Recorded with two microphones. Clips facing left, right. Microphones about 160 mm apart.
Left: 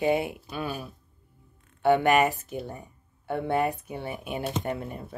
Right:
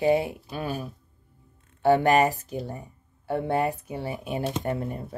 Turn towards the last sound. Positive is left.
turn(degrees=-35)  # may be behind; listen again after turning